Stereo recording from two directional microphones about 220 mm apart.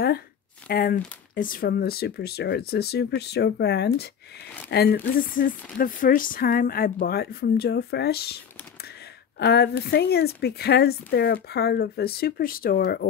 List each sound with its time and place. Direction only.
0.7 s speech: 40° left (ahead or behind)
9.4 s speech: 50° left (ahead or behind)